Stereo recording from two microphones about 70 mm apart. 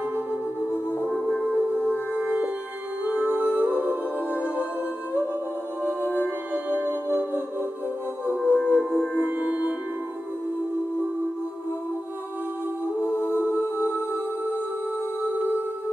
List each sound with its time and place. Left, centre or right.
1.1 s music: centre
6.1 s music: right
8.5 s music: right
13.0 s music: left